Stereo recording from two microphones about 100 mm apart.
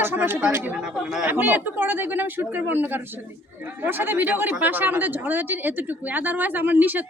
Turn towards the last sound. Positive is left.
turn(degrees=-20)  # may be behind; listen again after turning